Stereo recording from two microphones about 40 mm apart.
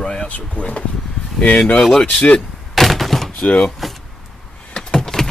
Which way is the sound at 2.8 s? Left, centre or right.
Centre.